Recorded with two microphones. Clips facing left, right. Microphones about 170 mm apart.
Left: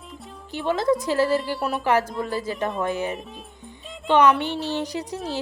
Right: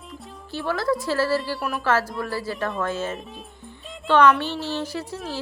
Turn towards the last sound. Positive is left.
turn(degrees=15)  # may be behind; listen again after turning